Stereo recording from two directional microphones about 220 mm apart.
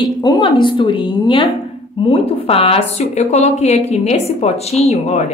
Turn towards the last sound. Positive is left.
turn(degrees=30)  # may be behind; listen again after turning